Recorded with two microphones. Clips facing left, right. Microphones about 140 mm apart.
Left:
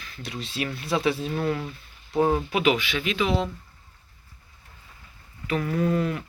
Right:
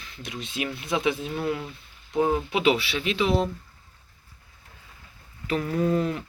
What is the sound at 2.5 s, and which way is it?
Speech, 30° right (ahead or behind).